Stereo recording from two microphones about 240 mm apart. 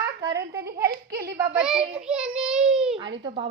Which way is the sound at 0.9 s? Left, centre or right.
Right.